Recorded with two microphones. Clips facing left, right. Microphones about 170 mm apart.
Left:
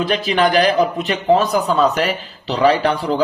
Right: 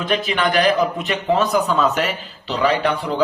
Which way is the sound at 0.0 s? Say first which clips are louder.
Left 4 dB; 35° left (ahead or behind).